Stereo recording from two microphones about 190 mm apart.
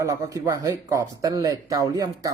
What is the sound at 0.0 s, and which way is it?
A man's voice, 15° right (ahead or behind).